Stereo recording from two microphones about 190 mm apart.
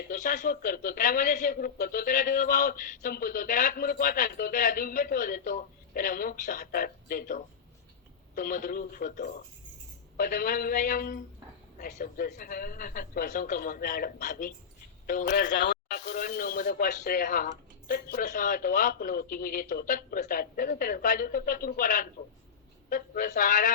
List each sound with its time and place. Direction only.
0.1 s a man's voice: 45° left (ahead or behind)